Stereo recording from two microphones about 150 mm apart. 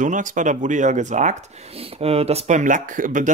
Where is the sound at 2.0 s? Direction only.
40° right (ahead or behind); by 3.3 s 60° right (ahead or behind).